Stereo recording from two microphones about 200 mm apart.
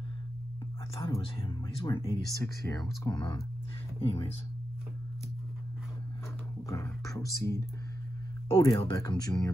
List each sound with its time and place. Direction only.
1.0 s speech: 25° left (ahead or behind)
6.7 s beatboxing: 15° left (ahead or behind)
7.3 s speech: 15° left (ahead or behind)
8.5 s speech: 25° left (ahead or behind)